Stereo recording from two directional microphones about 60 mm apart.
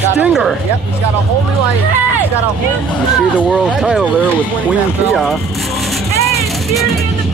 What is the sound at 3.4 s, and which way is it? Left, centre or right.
Speech, centre.